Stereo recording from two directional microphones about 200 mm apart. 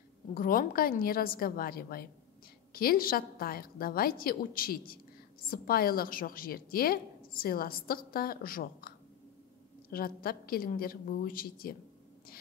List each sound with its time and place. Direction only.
0.3 s a woman's voice: 45° left (ahead or behind)